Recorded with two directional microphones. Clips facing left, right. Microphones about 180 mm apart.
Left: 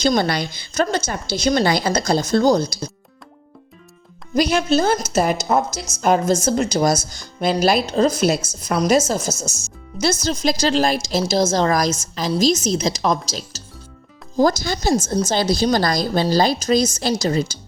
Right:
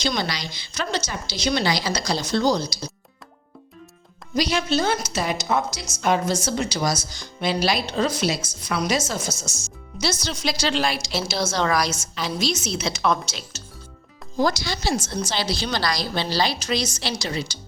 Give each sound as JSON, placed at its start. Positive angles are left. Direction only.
{"t": 0.0, "sound": "a woman's voice", "side_deg": 50}
{"t": 4.4, "sound": "a woman's voice", "side_deg": 50}